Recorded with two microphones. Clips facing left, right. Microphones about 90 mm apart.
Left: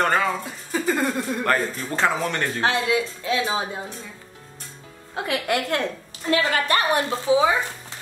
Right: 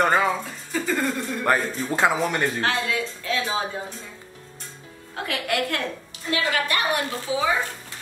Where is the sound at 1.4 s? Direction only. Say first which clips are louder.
Right 3 dB; 10° right (ahead or behind).